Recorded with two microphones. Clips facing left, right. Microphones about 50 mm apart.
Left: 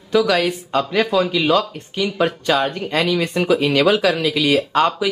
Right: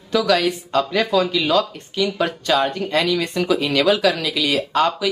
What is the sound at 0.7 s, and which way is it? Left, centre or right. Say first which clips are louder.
Speech: left 1 dB; centre.